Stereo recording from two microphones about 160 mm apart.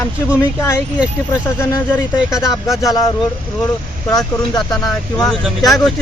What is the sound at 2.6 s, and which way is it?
Speech, 20° left (ahead or behind).